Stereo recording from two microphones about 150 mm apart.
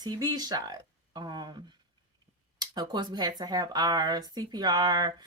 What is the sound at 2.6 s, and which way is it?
Speech, 25° right (ahead or behind).